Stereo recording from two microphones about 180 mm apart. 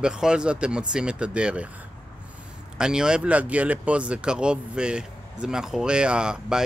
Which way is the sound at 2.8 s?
5° right (ahead or behind).